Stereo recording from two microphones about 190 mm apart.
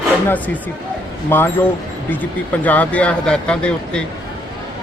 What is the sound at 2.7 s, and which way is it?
Speech, 10° left (ahead or behind).